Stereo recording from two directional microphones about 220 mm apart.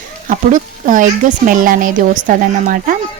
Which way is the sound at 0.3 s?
35° right (ahead or behind).